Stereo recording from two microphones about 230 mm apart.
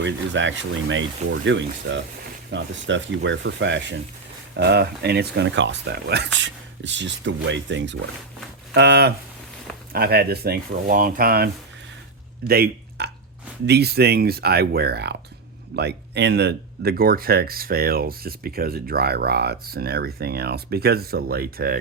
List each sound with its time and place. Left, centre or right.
0.0 s speech: right